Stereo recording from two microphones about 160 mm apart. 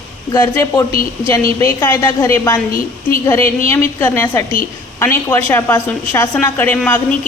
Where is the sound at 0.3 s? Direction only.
20° left (ahead or behind).